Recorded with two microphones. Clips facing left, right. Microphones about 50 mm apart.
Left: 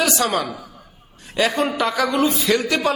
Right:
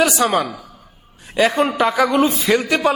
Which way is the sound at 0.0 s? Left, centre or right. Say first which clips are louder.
Right 4 dB; centre.